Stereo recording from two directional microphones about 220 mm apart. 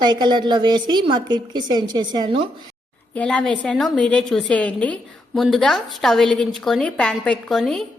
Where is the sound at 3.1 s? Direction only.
5° left (ahead or behind).